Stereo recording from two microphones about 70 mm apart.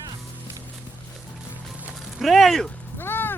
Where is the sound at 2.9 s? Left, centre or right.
Left.